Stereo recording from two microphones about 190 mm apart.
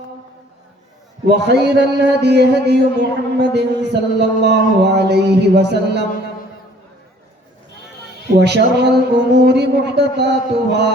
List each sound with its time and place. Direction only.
1.3 s a man's voice: 60° right (ahead or behind)
8.4 s a man's voice: 65° right (ahead or behind)